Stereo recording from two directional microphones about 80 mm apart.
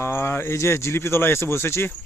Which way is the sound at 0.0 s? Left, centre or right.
Left.